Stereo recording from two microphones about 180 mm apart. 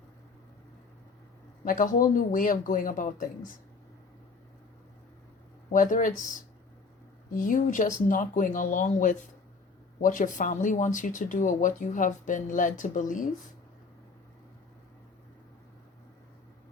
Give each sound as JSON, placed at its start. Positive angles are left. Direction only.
{"t": 1.6, "sound": "speech", "side_deg": 50}
{"t": 5.7, "sound": "speech", "side_deg": 45}